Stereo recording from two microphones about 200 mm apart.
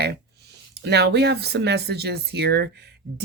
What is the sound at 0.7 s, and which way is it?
Speech, 55° right (ahead or behind).